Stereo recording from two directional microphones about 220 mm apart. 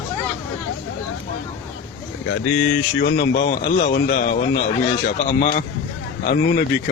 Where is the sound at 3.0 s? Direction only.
50° left (ahead or behind).